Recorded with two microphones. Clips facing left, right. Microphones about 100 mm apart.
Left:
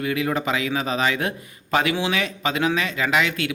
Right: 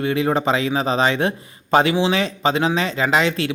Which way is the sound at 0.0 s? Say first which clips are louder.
Right 4 dB; 30° right (ahead or behind).